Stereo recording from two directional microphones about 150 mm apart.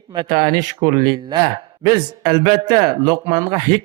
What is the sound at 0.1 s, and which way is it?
Speech, 30° right (ahead or behind).